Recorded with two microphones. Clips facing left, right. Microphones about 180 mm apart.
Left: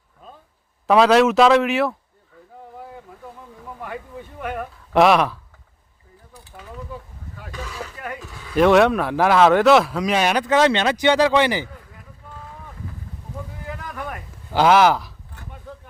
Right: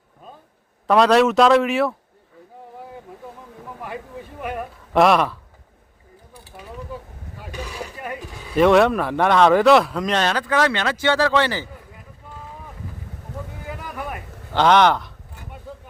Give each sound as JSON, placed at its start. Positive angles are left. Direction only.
{"t": 0.9, "sound": "speech", "side_deg": 0}
{"t": 4.4, "sound": "speech", "side_deg": -5}
{"t": 7.4, "sound": "a sound", "side_deg": -15}
{"t": 8.5, "sound": "speech", "side_deg": 0}
{"t": 13.7, "sound": "boat", "side_deg": -10}
{"t": 14.5, "sound": "speech", "side_deg": 5}